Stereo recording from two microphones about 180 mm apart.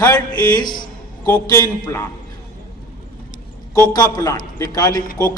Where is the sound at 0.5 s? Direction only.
25° left (ahead or behind).